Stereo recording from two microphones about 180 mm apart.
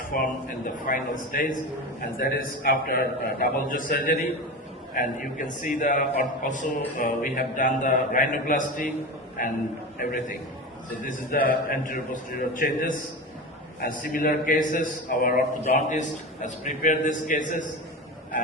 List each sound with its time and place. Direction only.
0.1 s a man's voice: 55° left (ahead or behind)
5.4 s a man's voice: 50° left (ahead or behind)